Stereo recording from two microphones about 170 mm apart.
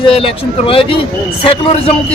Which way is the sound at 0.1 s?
35° left (ahead or behind).